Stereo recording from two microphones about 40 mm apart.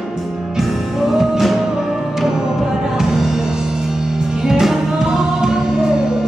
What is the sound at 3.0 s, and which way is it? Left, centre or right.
Music, centre.